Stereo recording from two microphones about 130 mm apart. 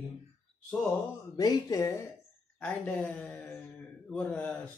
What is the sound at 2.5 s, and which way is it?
A man's voice, 10° left (ahead or behind).